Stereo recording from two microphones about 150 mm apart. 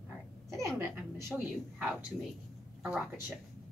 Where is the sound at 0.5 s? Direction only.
20° right (ahead or behind).